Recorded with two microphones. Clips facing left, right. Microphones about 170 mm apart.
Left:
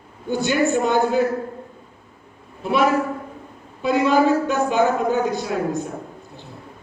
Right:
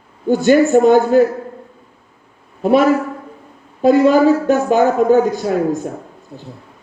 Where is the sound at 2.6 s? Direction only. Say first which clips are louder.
Right 6 dB; 45° right (ahead or behind).